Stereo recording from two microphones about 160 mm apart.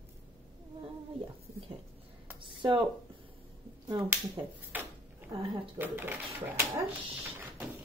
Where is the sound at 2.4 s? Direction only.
30° right (ahead or behind).